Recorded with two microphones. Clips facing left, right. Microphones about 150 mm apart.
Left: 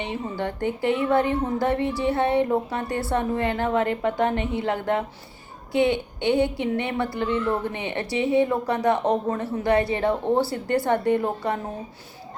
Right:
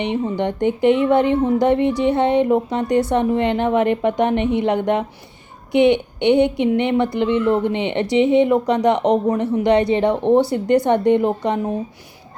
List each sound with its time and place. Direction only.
0.0 s speech: 20° right (ahead or behind)